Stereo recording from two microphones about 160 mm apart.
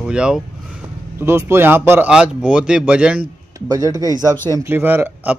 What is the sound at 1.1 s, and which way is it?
A man's voice, 15° right (ahead or behind).